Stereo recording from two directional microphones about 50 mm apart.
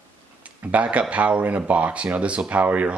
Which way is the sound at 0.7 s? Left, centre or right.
Right.